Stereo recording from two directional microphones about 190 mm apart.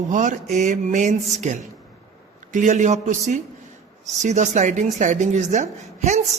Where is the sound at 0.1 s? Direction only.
40° right (ahead or behind).